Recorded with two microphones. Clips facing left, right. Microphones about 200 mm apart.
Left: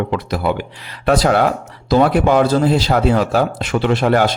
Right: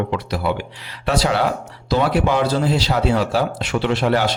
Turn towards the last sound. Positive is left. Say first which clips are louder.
# left 4 dB
turn(degrees=50)  # may be behind; listen again after turning